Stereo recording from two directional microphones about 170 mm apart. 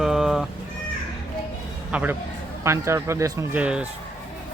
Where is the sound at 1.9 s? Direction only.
10° right (ahead or behind).